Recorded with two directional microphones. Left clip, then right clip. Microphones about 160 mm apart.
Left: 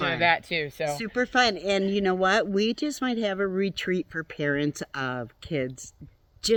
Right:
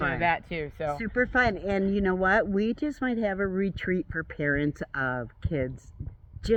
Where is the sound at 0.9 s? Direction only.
20° left (ahead or behind).